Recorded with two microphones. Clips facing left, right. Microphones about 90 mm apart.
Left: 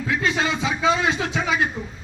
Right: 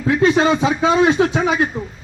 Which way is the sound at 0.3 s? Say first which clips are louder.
Right 8 dB; 40° right (ahead or behind).